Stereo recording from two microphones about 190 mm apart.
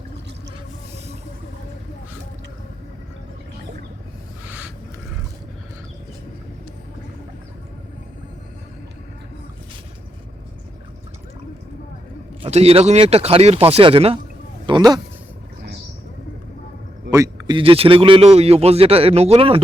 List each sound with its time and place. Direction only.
4.4 s a sound: 10° right (ahead or behind)
12.4 s speech: 35° right (ahead or behind)
17.1 s speech: 20° right (ahead or behind)